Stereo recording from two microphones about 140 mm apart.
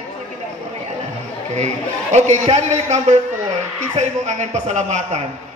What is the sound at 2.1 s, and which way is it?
A woman's voice, 55° right (ahead or behind).